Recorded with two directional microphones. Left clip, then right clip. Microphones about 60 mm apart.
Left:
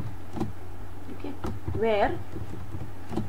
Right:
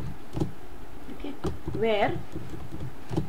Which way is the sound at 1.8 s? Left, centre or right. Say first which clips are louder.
Left 1 dB; centre.